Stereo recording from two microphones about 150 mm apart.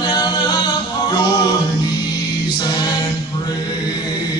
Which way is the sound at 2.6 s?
30° left (ahead or behind).